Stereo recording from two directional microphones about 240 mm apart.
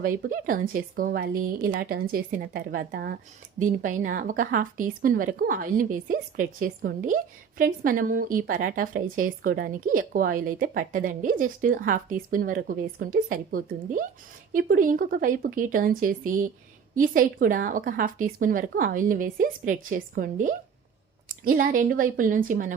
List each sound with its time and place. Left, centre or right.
0.0 s a woman's voice: right